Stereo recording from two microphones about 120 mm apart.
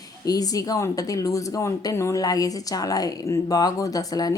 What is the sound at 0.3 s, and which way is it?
Speech, 30° left (ahead or behind).